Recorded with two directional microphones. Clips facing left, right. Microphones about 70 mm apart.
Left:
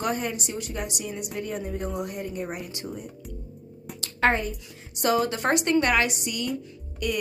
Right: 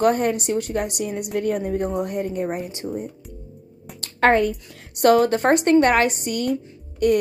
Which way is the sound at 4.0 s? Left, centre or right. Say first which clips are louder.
Right 6 dB; right.